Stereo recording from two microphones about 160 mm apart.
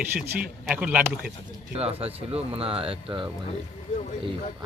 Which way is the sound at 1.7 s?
40° right (ahead or behind).